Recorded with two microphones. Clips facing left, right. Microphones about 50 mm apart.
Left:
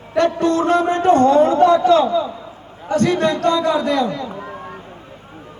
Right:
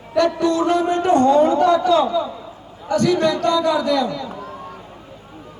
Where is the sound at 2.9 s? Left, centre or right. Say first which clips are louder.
Even; left.